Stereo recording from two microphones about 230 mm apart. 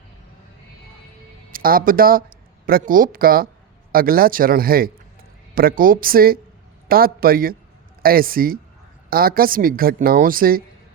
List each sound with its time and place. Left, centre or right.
1.5 s a woman's voice: right